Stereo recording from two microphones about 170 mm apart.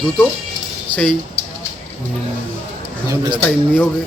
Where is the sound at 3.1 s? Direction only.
25° right (ahead or behind).